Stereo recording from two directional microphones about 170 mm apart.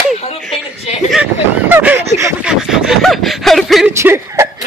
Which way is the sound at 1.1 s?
10° right (ahead or behind).